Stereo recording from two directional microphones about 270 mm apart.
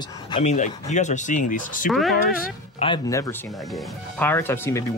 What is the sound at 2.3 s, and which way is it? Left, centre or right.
Speech, left.